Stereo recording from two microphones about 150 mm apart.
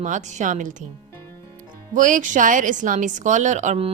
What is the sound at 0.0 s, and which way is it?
Speech, 55° right (ahead or behind).